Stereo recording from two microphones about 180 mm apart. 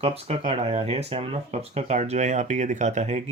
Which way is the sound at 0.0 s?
30° right (ahead or behind).